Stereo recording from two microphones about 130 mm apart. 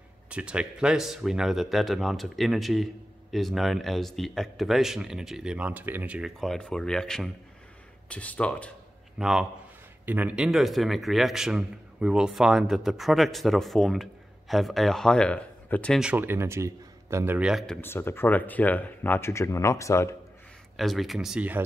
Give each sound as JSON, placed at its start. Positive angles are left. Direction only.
{"t": 0.3, "sound": "speech", "side_deg": -10}
{"t": 6.4, "sound": "speech", "side_deg": 5}
{"t": 9.2, "sound": "speech", "side_deg": -5}
{"t": 16.0, "sound": "a man's voice", "side_deg": -10}
{"t": 17.4, "sound": "speech", "side_deg": -5}
{"t": 17.6, "sound": "speech", "side_deg": 15}
{"t": 20.7, "sound": "speech", "side_deg": 0}